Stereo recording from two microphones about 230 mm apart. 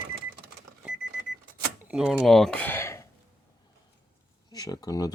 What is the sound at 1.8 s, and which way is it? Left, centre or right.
Speech, centre.